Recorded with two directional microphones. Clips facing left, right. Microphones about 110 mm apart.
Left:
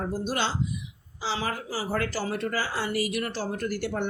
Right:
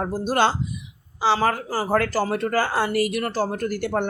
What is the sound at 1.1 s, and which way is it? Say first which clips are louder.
Speech: right 10 dB; 60° right (ahead or behind).